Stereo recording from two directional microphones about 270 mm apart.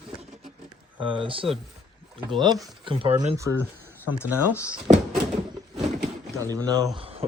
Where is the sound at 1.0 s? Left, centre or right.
Centre.